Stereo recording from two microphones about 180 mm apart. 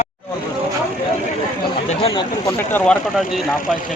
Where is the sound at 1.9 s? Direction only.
35° left (ahead or behind).